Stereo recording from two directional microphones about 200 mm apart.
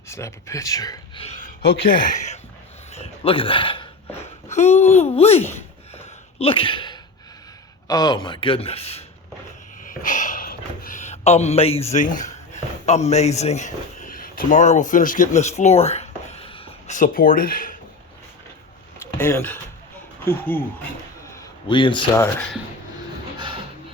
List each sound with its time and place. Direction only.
0.1 s speech: 15° left (ahead or behind)
1.6 s speech: 45° left (ahead or behind)
5.4 s speech: 10° left (ahead or behind)
5.9 s a sound: 30° left (ahead or behind)
7.9 s a man's voice: 20° left (ahead or behind)
9.8 s a sound: 40° left (ahead or behind)
13.1 s speech: 35° left (ahead or behind)
19.2 s speech: 10° left (ahead or behind)
21.2 s a sound: 20° left (ahead or behind)